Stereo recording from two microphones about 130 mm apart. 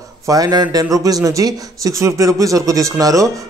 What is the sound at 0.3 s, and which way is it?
A man's voice, 30° right (ahead or behind).